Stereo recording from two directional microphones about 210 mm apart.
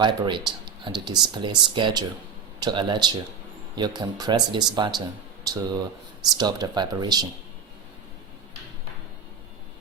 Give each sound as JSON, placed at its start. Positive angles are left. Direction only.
{"t": 0.0, "sound": "speech", "side_deg": -20}